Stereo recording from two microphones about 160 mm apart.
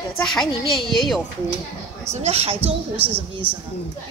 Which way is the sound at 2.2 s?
40° right (ahead or behind).